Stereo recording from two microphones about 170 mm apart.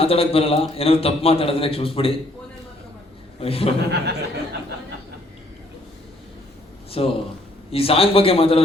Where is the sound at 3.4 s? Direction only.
35° left (ahead or behind).